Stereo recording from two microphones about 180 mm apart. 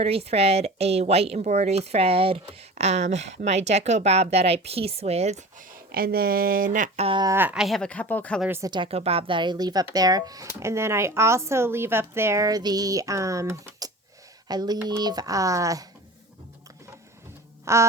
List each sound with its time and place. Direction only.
0.0 s a woman's voice: 35° right (ahead or behind)
7.3 s speech: 5° right (ahead or behind); by 8.4 s 10° left (ahead or behind)
8.4 s speech: 10° right (ahead or behind)
8.7 s speech: 30° right (ahead or behind)
17.7 s speech: 15° right (ahead or behind)